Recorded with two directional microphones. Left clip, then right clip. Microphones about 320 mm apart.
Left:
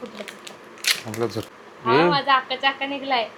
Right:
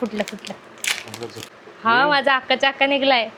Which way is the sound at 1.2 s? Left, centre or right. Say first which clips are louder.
Left 7 dB; left.